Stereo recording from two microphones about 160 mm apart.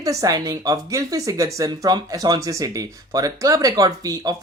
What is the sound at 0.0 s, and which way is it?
Speech, 20° right (ahead or behind).